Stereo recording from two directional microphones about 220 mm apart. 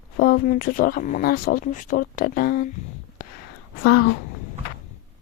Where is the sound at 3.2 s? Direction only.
40° left (ahead or behind).